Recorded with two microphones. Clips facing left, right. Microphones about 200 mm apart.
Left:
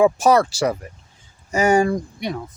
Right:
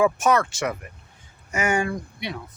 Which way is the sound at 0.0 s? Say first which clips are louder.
Left 5 dB; 35° left (ahead or behind).